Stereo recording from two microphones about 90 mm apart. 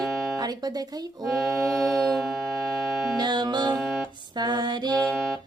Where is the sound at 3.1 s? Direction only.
50° right (ahead or behind).